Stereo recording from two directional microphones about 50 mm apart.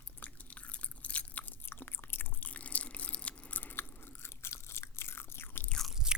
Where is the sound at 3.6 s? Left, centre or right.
Left.